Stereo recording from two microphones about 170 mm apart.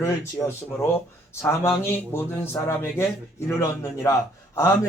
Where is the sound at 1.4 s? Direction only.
15° left (ahead or behind).